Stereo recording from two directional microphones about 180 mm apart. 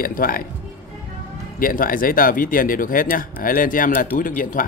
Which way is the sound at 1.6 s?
50° left (ahead or behind).